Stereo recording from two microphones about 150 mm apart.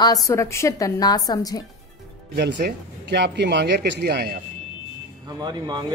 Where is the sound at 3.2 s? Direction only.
90° right.